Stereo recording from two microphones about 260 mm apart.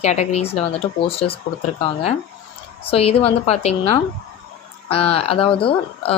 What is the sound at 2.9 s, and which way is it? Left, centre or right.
Speech, left.